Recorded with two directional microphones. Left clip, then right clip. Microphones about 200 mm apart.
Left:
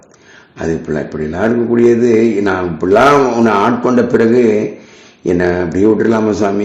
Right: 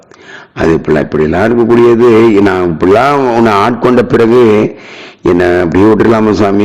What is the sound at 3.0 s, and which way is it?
A man's voice, 40° right (ahead or behind).